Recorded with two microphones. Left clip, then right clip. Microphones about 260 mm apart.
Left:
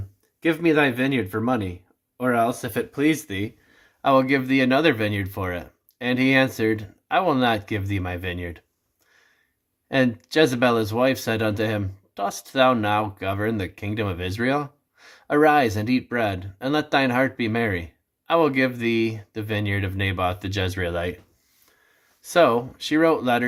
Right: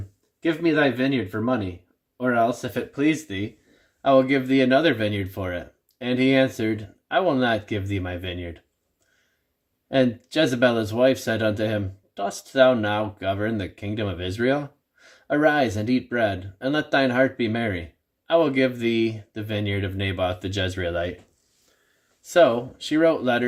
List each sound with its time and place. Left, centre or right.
0.4 s speech: centre
10.3 s speech: centre
22.3 s speech: centre